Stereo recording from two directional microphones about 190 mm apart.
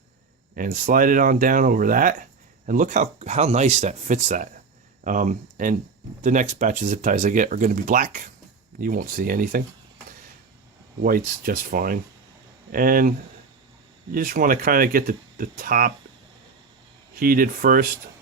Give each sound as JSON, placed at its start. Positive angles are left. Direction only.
{"t": 0.5, "sound": "speech", "side_deg": -45}
{"t": 11.0, "sound": "speech", "side_deg": -50}
{"t": 17.2, "sound": "speech", "side_deg": -50}